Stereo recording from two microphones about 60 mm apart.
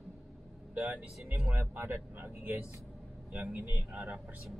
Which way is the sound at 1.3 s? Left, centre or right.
Right.